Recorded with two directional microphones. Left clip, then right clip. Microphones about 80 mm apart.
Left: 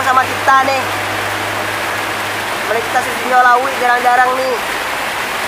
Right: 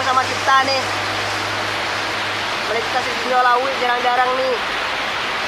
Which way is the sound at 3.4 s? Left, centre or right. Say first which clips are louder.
Left 6 dB; left.